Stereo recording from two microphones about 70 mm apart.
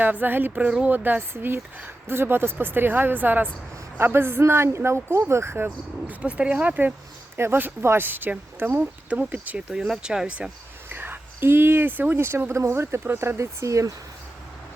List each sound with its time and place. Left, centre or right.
0.0 s speech: right
5.6 s speech: right
8.8 s speech: centre
9.6 s speech: centre
10.8 s speech: right